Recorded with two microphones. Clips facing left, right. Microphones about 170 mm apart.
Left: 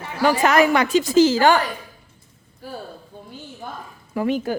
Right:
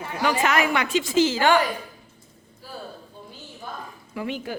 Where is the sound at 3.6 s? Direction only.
55° left (ahead or behind).